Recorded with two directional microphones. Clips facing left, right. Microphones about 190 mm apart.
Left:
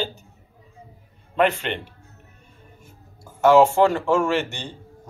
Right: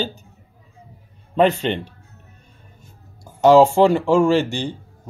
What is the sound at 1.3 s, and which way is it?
Speech, 25° right (ahead or behind).